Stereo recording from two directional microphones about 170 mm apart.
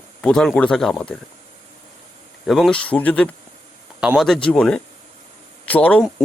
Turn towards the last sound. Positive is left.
turn(degrees=10)  # may be behind; listen again after turning